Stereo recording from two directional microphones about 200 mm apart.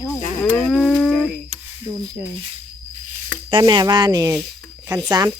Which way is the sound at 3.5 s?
20° right (ahead or behind).